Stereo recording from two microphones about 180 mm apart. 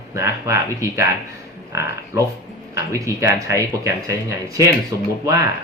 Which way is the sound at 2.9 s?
15° right (ahead or behind).